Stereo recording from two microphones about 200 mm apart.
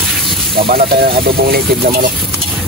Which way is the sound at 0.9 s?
50° right (ahead or behind).